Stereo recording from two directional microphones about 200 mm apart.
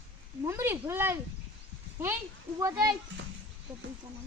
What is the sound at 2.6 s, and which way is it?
Speech, 15° right (ahead or behind).